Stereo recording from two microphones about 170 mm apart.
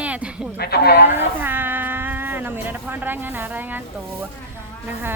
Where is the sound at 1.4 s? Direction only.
10° right (ahead or behind).